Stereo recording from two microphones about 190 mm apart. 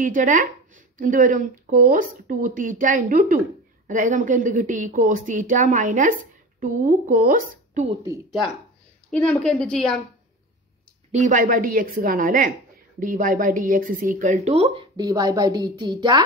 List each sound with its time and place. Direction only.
0.0 s speech: 40° right (ahead or behind)
9.1 s a woman's voice: 5° left (ahead or behind)
11.1 s speech: 40° right (ahead or behind); by 16.3 s 20° right (ahead or behind)